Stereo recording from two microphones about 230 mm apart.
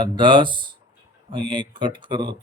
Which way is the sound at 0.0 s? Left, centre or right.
Right.